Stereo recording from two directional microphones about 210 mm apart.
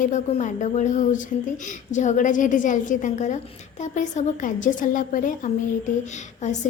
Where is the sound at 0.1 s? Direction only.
35° left (ahead or behind).